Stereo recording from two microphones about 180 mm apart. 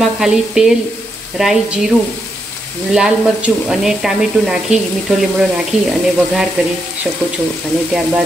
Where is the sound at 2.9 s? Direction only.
5° right (ahead or behind).